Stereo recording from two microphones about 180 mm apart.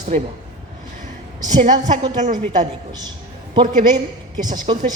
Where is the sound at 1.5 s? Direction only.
45° right (ahead or behind).